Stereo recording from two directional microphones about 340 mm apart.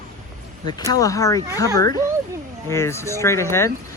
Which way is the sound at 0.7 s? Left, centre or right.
Centre.